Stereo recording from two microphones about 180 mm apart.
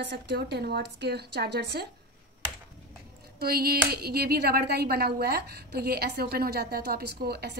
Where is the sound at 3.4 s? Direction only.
60° right (ahead or behind).